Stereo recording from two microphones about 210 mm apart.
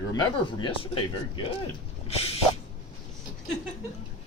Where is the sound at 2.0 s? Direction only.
30° left (ahead or behind).